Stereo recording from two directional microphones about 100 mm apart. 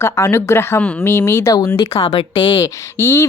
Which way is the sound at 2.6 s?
30° left (ahead or behind).